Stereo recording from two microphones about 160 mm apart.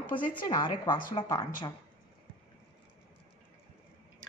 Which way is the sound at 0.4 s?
30° left (ahead or behind).